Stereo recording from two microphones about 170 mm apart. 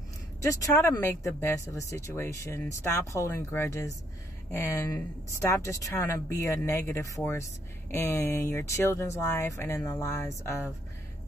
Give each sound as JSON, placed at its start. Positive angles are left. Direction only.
{"t": 0.4, "sound": "speech", "side_deg": 20}